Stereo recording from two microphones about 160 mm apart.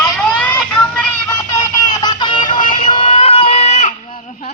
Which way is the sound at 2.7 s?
35° left (ahead or behind).